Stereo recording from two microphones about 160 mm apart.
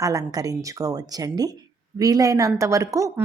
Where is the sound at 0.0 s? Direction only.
20° right (ahead or behind).